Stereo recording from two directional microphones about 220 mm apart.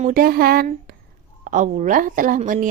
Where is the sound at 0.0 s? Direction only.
40° right (ahead or behind).